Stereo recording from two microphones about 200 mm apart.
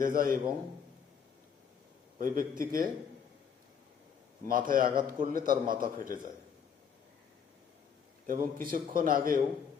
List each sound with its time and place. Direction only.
0.0 s a man's voice: 45° right (ahead or behind)
2.1 s a man's voice: 45° right (ahead or behind)
4.4 s a man's voice: 45° right (ahead or behind)
8.3 s a man's voice: 45° right (ahead or behind)